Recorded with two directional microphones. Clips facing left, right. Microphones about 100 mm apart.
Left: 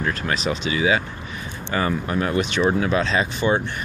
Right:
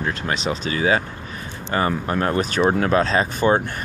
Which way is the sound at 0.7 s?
40° right (ahead or behind).